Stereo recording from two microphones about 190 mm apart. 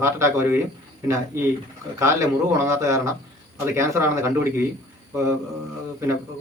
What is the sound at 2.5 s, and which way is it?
A man's voice, 15° right (ahead or behind).